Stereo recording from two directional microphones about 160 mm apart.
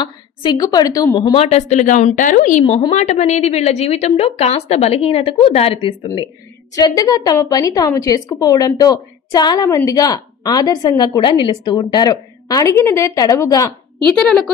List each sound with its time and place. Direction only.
0.0 s a woman's voice: 30° left (ahead or behind)
1.4 s a woman's voice: 45° left (ahead or behind)
2.6 s a woman's voice: 40° left (ahead or behind); by 13.7 s 20° left (ahead or behind)
14.1 s a woman's voice: 5° left (ahead or behind)